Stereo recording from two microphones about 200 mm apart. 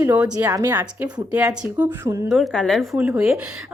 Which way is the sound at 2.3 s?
Centre (ahead or behind).